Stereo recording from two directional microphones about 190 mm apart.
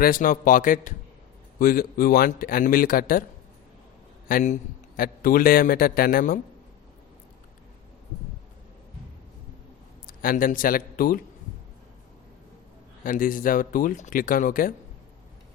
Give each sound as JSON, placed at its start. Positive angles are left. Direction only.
{"t": 0.0, "sound": "speech", "side_deg": 45}
{"t": 4.3, "sound": "speech", "side_deg": 50}
{"t": 10.1, "sound": "a man's voice", "side_deg": 45}
{"t": 13.1, "sound": "speech", "side_deg": 45}